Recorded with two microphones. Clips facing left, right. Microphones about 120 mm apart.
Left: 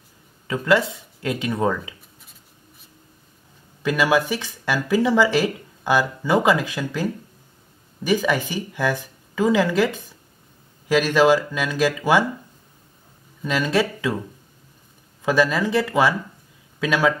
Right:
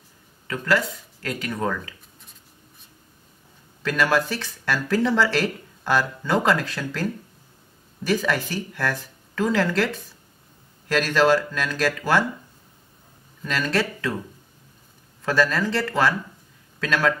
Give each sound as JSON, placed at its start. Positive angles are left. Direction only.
{"t": 0.5, "sound": "speech", "side_deg": 20}
{"t": 3.8, "sound": "speech", "side_deg": 10}
{"t": 13.4, "sound": "speech", "side_deg": 10}
{"t": 15.2, "sound": "speech", "side_deg": 15}